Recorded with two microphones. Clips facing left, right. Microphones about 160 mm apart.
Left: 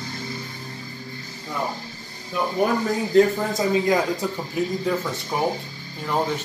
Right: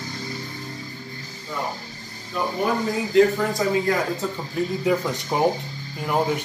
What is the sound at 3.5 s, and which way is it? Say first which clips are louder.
Speech: left 1 dB; 20° left (ahead or behind).